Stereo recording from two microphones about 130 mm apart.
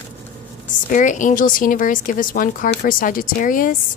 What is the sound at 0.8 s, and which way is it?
A woman's voice, 75° left (ahead or behind).